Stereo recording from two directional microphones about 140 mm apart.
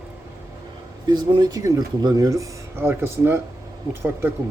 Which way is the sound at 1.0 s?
30° right (ahead or behind).